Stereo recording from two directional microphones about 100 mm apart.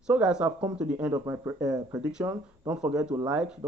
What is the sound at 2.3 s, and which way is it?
Speech, 30° right (ahead or behind).